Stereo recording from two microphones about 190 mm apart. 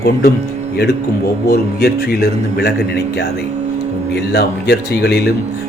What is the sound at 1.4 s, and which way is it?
A man's voice, 55° left (ahead or behind).